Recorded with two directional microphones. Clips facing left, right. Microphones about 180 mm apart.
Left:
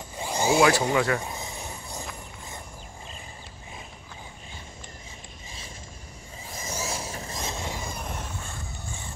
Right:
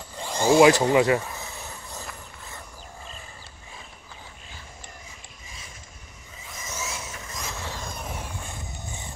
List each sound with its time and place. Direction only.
0.1 s tools: 10° left (ahead or behind)
0.6 s speech: 20° right (ahead or behind)
1.2 s a sound: 15° left (ahead or behind)
6.4 s vehicle: 35° left (ahead or behind); by 7.9 s 15° left (ahead or behind)
7.9 s vehicle: 5° right (ahead or behind)